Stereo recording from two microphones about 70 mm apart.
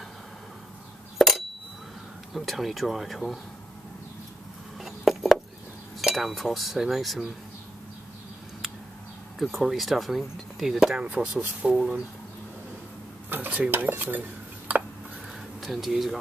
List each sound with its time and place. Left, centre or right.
1.1 s a sound: centre
2.3 s speech: centre
4.7 s a sound: centre
5.9 s speech: centre
9.4 s speech: centre
13.3 s dishes: right
15.6 s speech: centre